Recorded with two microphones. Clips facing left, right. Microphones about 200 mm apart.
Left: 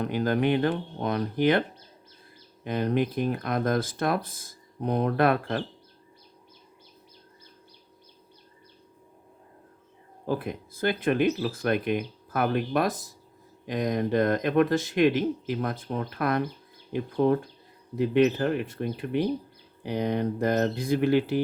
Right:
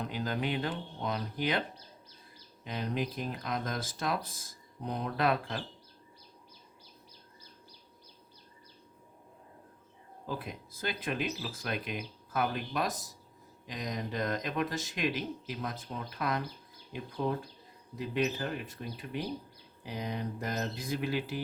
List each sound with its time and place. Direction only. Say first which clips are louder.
0.0 s speech: left 9 dB; 60° left (ahead or behind)
2.6 s speech: left 9 dB; 60° left (ahead or behind)
10.2 s speech: left 10 dB; 55° left (ahead or behind)